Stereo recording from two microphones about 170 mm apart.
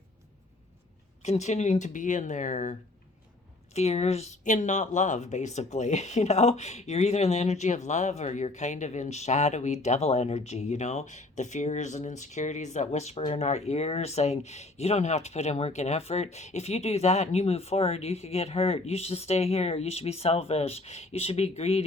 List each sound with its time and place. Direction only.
1.2 s speech: 40° left (ahead or behind)
3.8 s speech: 40° left (ahead or behind)